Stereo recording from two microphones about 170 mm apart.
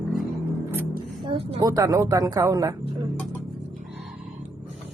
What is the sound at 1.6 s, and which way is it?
Speech, 20° right (ahead or behind).